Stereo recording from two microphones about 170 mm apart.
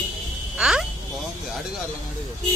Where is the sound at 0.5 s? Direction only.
5° right (ahead or behind).